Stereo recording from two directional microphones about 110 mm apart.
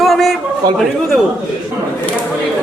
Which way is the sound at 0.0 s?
Centre (ahead or behind).